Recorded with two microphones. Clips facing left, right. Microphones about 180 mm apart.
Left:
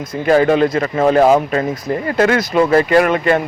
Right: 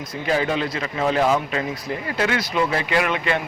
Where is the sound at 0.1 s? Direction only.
55° left (ahead or behind).